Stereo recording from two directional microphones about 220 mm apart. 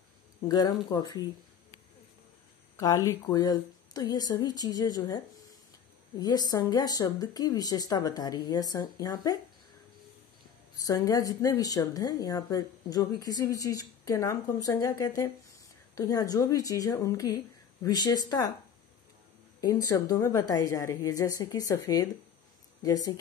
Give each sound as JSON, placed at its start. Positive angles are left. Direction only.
{"t": 0.5, "sound": "speech", "side_deg": 20}
{"t": 2.8, "sound": "speech", "side_deg": 15}
{"t": 10.9, "sound": "speech", "side_deg": 15}
{"t": 19.6, "sound": "speech", "side_deg": 15}